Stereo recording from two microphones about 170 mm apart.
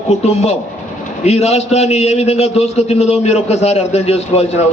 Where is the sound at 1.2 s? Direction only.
40° left (ahead or behind).